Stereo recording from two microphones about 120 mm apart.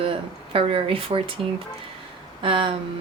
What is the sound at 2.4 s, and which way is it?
Speech, 45° right (ahead or behind).